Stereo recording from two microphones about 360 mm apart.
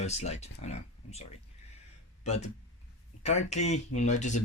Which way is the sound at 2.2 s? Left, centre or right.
Centre.